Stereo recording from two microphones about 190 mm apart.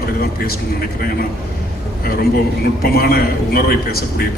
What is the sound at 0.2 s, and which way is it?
Speech, 50° left (ahead or behind).